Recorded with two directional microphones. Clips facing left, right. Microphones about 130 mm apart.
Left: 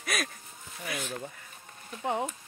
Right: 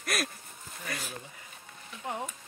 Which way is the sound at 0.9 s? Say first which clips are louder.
Left 3 dB; centre (ahead or behind).